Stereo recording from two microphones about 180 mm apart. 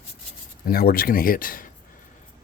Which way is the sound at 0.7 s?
55° left (ahead or behind).